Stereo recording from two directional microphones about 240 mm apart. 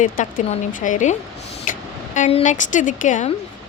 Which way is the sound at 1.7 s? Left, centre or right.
Left.